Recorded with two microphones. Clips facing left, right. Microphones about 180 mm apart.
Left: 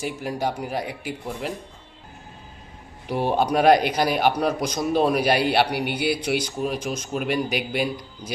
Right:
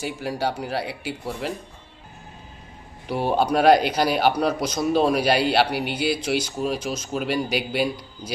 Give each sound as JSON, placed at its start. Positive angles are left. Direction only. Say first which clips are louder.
{"t": 0.0, "sound": "speech", "louder": "even", "side_deg": 0}
{"t": 3.1, "sound": "speech", "louder": "even", "side_deg": -5}
{"t": 5.8, "sound": "speech", "louder": "even", "side_deg": 60}
{"t": 6.4, "sound": "speech", "louder": "right 1 dB", "side_deg": -5}